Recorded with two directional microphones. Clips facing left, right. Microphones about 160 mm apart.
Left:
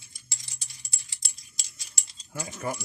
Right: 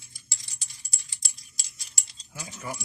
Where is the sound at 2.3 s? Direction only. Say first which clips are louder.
Left 6 dB; 55° left (ahead or behind).